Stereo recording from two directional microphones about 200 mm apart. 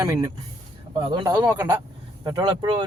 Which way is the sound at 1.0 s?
25° right (ahead or behind).